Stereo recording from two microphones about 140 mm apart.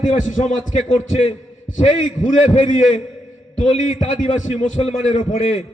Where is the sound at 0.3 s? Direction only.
60° left (ahead or behind).